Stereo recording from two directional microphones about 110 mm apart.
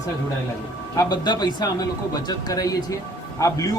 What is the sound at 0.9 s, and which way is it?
A man's voice, 40° left (ahead or behind).